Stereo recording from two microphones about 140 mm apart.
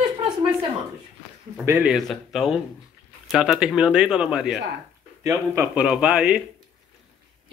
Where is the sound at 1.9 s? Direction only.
Centre (ahead or behind).